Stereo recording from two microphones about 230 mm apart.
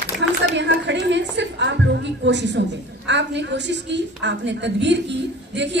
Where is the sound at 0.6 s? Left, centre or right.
Right.